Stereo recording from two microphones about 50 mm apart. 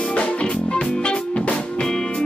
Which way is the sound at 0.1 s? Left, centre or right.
Left.